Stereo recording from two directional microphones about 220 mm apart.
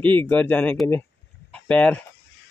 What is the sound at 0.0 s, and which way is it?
Speech, 10° left (ahead or behind).